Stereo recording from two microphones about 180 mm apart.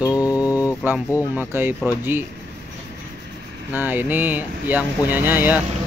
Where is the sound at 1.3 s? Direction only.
10° right (ahead or behind).